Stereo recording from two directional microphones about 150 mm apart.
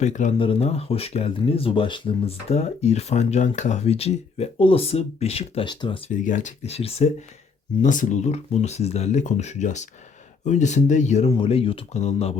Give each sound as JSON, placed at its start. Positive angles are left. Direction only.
{"t": 0.0, "sound": "speech", "side_deg": 50}
{"t": 0.3, "sound": "speech", "side_deg": 40}
{"t": 6.1, "sound": "speech", "side_deg": 55}
{"t": 7.8, "sound": "speech", "side_deg": 55}
{"t": 11.3, "sound": "speech", "side_deg": 40}